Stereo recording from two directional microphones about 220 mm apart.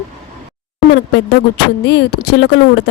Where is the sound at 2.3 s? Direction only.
50° left (ahead or behind).